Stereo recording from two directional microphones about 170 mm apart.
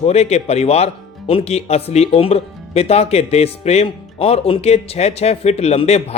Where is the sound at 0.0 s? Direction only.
40° left (ahead or behind).